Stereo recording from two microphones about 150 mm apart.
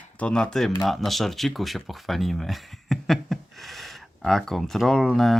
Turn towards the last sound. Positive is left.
turn(degrees=0)  # may be behind; listen again after turning